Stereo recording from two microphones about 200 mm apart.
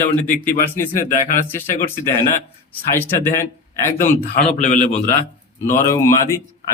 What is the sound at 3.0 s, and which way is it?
Speech, 10° left (ahead or behind).